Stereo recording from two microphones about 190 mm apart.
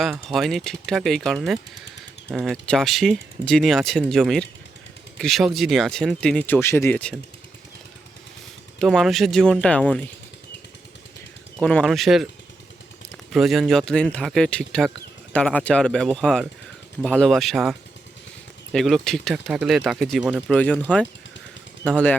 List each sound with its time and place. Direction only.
0.0 s speech: centre (ahead or behind)
8.8 s speech: centre (ahead or behind)
11.6 s speech: 5° left (ahead or behind)
13.3 s speech: centre (ahead or behind)
21.8 s speech: 5° left (ahead or behind)